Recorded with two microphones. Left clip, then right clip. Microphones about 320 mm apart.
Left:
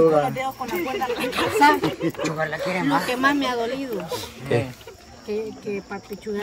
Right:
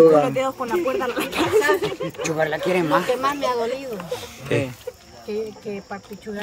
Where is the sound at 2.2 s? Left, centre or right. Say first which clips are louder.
Right 3 dB; right.